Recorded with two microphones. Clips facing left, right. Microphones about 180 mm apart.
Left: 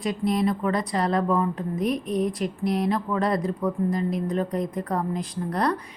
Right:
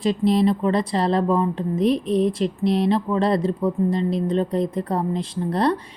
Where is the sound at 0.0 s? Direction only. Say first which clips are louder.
Right 5 dB; 25° right (ahead or behind).